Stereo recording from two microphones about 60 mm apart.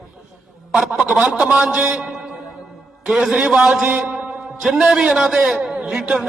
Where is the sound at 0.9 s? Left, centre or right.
Centre.